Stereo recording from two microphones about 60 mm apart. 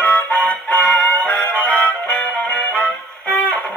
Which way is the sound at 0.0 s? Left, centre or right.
Left.